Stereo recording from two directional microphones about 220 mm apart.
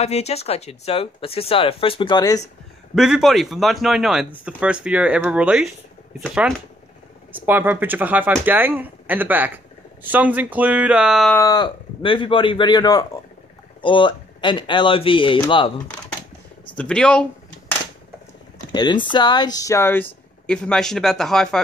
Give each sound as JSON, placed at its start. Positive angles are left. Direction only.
{"t": 0.0, "sound": "speech", "side_deg": 30}
{"t": 2.9, "sound": "speech", "side_deg": 0}
{"t": 11.3, "sound": "speech", "side_deg": 15}
{"t": 16.7, "sound": "a sound", "side_deg": 5}
{"t": 18.7, "sound": "speech", "side_deg": 20}